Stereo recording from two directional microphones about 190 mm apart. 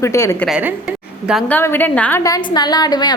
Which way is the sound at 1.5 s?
10° left (ahead or behind).